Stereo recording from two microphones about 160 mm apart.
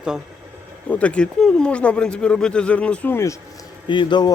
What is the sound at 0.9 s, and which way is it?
Speech, 10° left (ahead or behind).